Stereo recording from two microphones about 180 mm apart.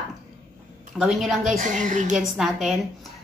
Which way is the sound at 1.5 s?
45° right (ahead or behind).